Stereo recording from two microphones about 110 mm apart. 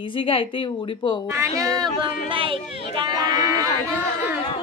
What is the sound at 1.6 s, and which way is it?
Speech, 35° right (ahead or behind).